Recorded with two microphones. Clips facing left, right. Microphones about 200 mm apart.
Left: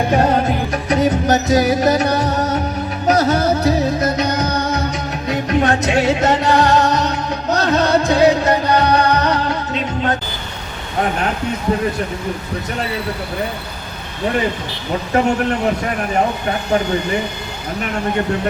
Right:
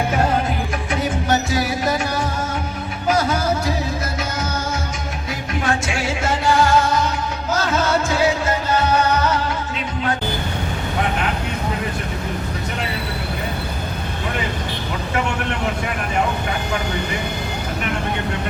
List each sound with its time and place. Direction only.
0.9 s music: 40° left (ahead or behind)